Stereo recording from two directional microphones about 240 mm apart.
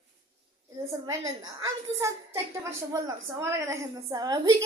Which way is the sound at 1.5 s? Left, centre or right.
Centre.